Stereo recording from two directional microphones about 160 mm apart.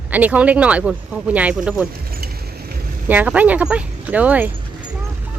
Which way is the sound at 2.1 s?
70° right (ahead or behind).